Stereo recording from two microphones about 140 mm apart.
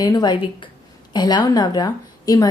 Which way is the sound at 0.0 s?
30° left (ahead or behind).